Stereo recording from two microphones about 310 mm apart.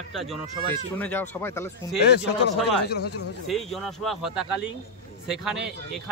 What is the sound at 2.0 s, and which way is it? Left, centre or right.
Speech, left.